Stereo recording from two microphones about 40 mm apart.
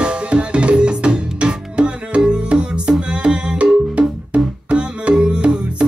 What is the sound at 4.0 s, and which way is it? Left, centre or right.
Music, right.